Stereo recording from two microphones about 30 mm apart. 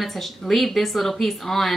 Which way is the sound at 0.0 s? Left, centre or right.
Centre.